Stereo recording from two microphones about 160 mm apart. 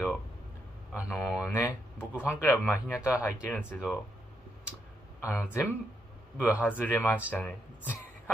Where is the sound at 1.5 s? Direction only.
15° left (ahead or behind).